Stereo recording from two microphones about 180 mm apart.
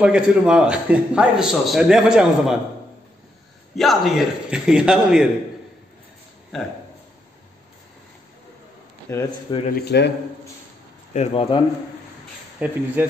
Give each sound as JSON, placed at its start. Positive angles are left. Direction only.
{"t": 0.0, "sound": "a man's voice", "side_deg": -5}
{"t": 3.7, "sound": "a man's voice", "side_deg": 0}
{"t": 6.5, "sound": "a man's voice", "side_deg": 0}
{"t": 9.1, "sound": "speech", "side_deg": 15}
{"t": 9.7, "sound": "a man's voice", "side_deg": 60}
{"t": 11.1, "sound": "a man's voice", "side_deg": 30}
{"t": 12.5, "sound": "speech", "side_deg": -10}